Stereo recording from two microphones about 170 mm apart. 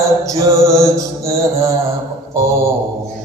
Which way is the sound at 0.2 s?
20° right (ahead or behind).